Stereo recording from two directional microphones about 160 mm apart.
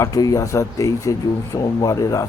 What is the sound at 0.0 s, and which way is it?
Speech, 20° left (ahead or behind).